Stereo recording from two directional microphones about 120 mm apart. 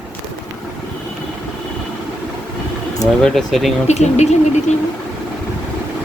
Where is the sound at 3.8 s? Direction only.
70° left (ahead or behind).